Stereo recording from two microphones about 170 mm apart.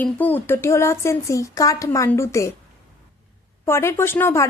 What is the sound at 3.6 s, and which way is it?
Speech, 15° left (ahead or behind).